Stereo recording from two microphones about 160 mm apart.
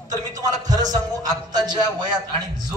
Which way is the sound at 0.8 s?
25° right (ahead or behind).